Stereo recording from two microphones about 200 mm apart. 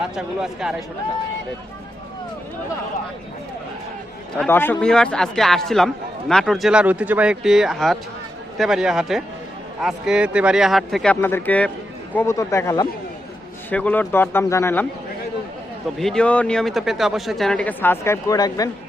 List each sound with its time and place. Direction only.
0.2 s a man's voice: 5° right (ahead or behind)
4.4 s a man's voice: 10° left (ahead or behind)
16.0 s a man's voice: 5° left (ahead or behind); by 18.7 s 20° left (ahead or behind)